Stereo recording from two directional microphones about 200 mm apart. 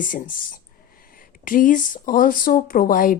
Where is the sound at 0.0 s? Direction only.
40° left (ahead or behind).